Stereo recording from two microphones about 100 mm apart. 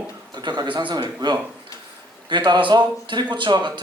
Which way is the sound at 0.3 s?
45° right (ahead or behind).